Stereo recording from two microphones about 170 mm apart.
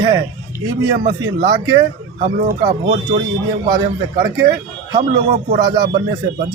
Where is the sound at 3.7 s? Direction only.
60° right (ahead or behind).